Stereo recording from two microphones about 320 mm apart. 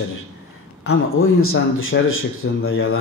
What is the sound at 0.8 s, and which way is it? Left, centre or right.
Speech, left.